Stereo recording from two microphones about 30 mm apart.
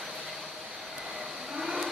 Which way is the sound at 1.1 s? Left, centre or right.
Centre.